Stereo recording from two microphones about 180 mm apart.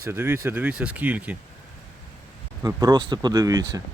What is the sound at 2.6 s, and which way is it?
Speech, 20° right (ahead or behind).